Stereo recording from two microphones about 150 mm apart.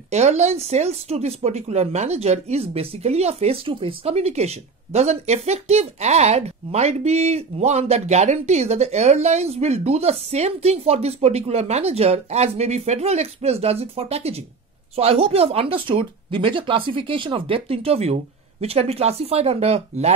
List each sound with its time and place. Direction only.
0.1 s speech: 50° right (ahead or behind)